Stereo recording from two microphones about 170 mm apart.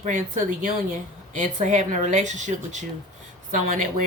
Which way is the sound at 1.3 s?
45° right (ahead or behind).